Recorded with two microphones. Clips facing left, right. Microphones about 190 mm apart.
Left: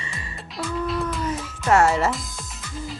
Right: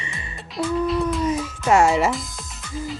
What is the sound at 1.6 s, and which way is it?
Speech, 15° right (ahead or behind).